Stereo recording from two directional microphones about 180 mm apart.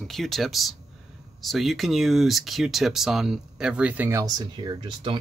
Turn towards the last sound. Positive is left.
turn(degrees=-25)  # may be behind; listen again after turning